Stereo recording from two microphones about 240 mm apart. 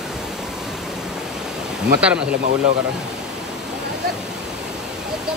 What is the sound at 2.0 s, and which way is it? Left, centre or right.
Speech, centre.